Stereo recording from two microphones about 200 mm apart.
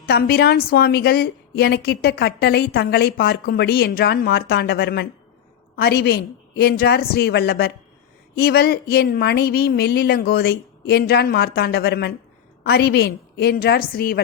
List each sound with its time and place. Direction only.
0.0 s a woman's voice: 50° left (ahead or behind)